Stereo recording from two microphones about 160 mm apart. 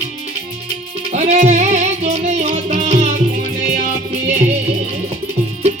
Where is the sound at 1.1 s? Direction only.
45° right (ahead or behind).